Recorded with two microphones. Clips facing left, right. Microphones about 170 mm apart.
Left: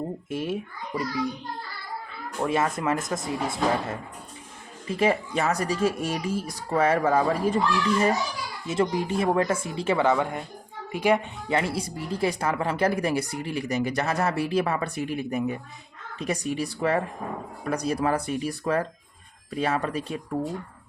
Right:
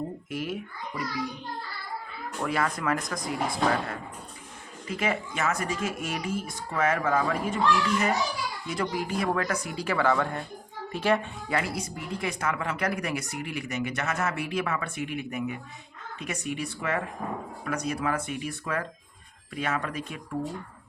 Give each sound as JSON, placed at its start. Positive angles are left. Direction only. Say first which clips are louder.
{"t": 0.3, "sound": "speech", "louder": "left 4 dB", "side_deg": 25}
{"t": 2.4, "sound": "speech", "louder": "left 4 dB", "side_deg": 25}